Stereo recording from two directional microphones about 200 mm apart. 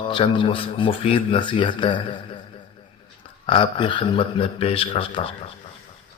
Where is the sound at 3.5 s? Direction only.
25° left (ahead or behind).